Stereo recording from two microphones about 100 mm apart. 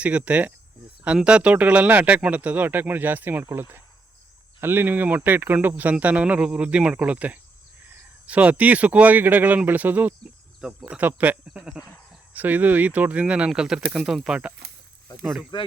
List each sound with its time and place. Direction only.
0.0 s speech: 15° right (ahead or behind)